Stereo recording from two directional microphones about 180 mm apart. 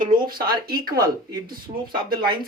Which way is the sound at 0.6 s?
55° right (ahead or behind).